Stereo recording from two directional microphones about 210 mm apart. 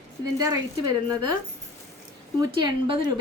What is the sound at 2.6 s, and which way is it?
Speech, 20° right (ahead or behind).